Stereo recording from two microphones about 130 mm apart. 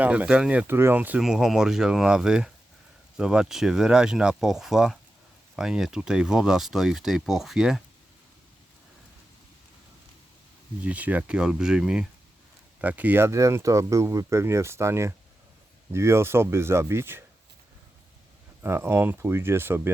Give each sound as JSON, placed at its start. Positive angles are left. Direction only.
{"t": 0.0, "sound": "speech", "side_deg": -10}
{"t": 10.8, "sound": "speech", "side_deg": -10}
{"t": 18.6, "sound": "speech", "side_deg": -20}